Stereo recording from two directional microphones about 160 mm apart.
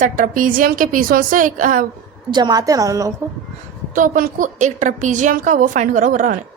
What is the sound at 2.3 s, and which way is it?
Speech, 25° right (ahead or behind).